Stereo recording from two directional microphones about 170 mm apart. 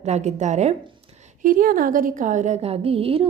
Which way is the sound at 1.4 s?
55° right (ahead or behind).